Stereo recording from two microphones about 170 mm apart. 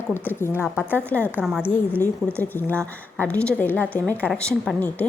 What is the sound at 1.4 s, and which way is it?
Speech, 5° right (ahead or behind).